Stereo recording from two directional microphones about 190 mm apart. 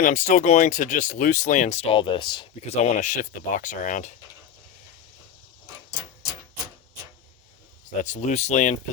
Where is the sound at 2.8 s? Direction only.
40° left (ahead or behind).